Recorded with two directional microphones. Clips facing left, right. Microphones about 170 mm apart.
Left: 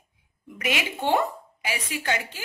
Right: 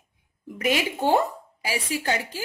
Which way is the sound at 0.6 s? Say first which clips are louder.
Right 4 dB; 40° right (ahead or behind).